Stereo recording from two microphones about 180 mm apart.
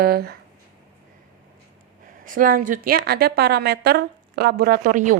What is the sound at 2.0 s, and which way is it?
A woman's voice, 50° right (ahead or behind).